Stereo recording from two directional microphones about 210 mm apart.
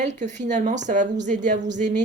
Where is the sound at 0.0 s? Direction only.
35° right (ahead or behind).